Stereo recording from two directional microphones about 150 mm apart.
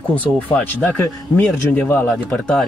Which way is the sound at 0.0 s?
10° left (ahead or behind).